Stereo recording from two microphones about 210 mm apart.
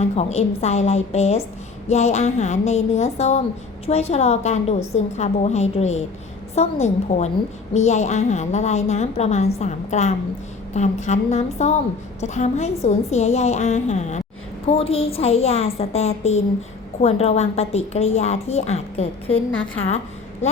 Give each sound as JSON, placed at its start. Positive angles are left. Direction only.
{"t": 0.0, "sound": "a woman's voice", "side_deg": 30}
{"t": 19.5, "sound": "a woman's voice", "side_deg": 65}
{"t": 20.4, "sound": "a woman's voice", "side_deg": 30}